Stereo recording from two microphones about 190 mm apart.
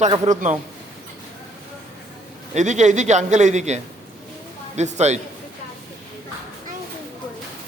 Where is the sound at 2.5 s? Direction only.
40° right (ahead or behind).